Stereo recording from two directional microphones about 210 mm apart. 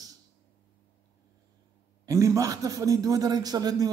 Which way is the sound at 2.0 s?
15° right (ahead or behind).